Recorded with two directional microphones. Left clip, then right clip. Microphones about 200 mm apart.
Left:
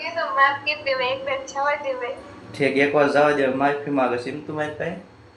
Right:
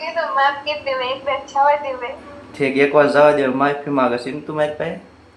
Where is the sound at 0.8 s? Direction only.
5° right (ahead or behind).